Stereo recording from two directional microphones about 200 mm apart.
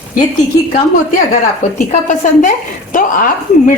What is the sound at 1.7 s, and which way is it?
A woman's voice, 40° left (ahead or behind).